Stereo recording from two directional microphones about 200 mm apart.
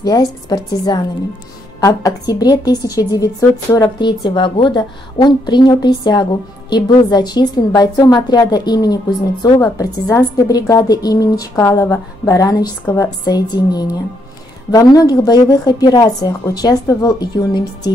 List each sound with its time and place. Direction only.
0.0 s a woman's voice: 20° left (ahead or behind)